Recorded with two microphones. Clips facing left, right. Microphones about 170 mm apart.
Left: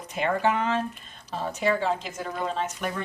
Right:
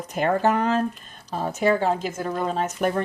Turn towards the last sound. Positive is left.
turn(degrees=-45)  # may be behind; listen again after turning